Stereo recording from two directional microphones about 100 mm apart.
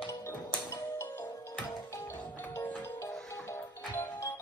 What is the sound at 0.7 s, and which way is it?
Music, 30° left (ahead or behind).